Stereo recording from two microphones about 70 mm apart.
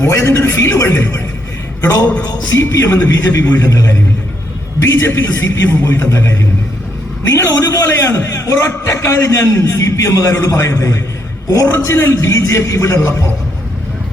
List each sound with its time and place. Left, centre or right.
0.0 s a man's voice: left